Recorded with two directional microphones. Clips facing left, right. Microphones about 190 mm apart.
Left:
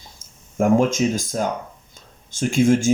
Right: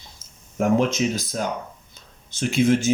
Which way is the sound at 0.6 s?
45° left (ahead or behind).